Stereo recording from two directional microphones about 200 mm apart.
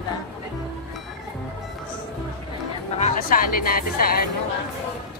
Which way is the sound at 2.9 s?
40° left (ahead or behind).